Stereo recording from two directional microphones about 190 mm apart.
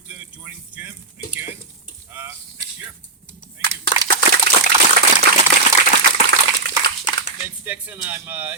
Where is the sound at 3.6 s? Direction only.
10° right (ahead or behind).